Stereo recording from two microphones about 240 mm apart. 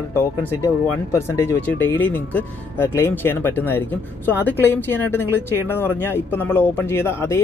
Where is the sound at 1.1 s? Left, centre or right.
Centre.